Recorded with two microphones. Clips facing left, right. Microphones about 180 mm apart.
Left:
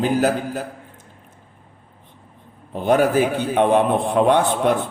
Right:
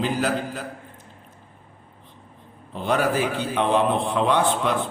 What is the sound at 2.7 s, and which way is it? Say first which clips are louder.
A man's voice: left 6 dB; 50° left (ahead or behind).